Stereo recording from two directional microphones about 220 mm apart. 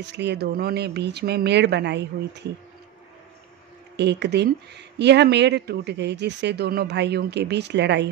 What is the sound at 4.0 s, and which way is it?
Speech, 50° right (ahead or behind).